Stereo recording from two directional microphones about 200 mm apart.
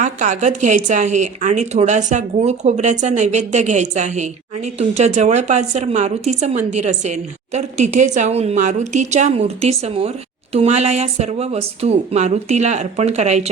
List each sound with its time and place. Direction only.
0.0 s speech: 35° right (ahead or behind)